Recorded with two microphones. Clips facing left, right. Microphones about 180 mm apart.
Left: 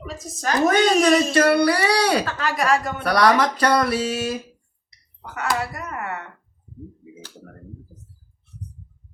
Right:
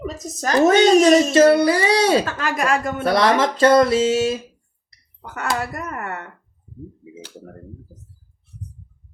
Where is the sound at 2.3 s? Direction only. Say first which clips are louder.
Even; 45° right (ahead or behind).